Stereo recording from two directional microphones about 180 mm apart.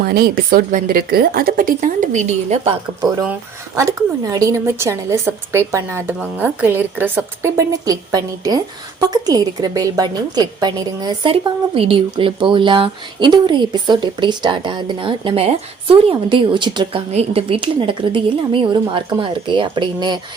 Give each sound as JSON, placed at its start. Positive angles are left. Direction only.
{"t": 0.0, "sound": "speech", "side_deg": -55}
{"t": 3.8, "sound": "a woman's voice", "side_deg": -20}